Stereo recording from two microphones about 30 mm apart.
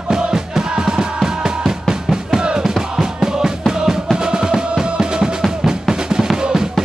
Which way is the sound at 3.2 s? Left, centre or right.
Centre.